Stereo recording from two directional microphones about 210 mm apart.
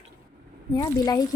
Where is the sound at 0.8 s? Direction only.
20° left (ahead or behind).